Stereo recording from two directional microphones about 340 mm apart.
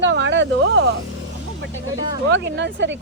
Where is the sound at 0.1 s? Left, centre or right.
Right.